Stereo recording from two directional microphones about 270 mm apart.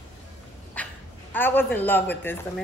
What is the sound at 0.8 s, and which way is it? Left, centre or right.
Dog, centre.